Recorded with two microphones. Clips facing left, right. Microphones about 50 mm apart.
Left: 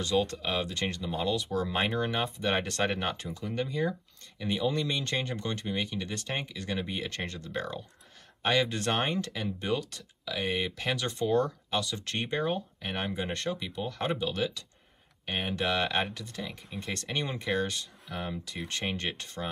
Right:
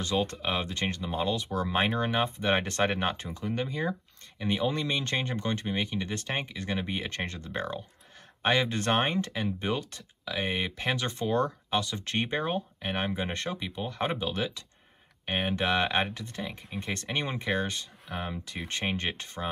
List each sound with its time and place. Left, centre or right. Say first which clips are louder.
0.0 s speech: left 1 dB; right